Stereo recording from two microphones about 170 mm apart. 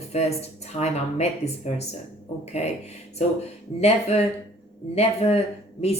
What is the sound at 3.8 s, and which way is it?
Speech, 40° left (ahead or behind).